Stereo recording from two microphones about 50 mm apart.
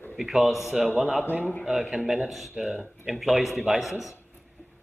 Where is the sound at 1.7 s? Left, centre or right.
Centre.